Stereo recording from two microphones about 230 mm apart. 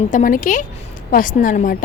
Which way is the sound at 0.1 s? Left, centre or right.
Left.